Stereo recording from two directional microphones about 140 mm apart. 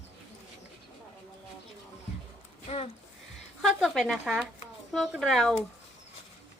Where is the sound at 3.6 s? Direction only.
Centre (ahead or behind).